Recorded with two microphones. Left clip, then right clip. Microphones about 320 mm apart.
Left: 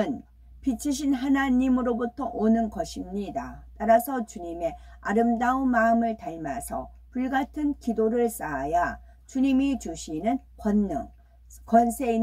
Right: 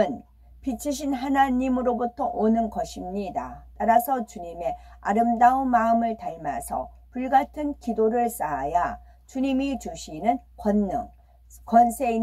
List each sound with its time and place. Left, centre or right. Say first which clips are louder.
0.7 s a woman's voice: left 1 dB; centre